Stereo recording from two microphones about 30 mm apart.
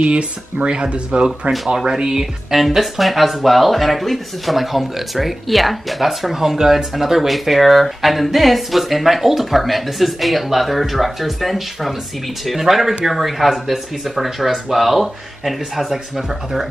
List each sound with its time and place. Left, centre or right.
0.0 s speech: right
2.0 s speech: centre
2.5 s speech: centre